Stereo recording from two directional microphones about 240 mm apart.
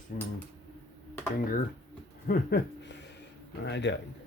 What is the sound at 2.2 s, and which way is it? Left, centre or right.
Speech, left.